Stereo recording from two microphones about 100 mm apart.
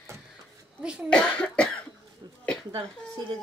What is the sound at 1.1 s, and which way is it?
Cough, 10° left (ahead or behind).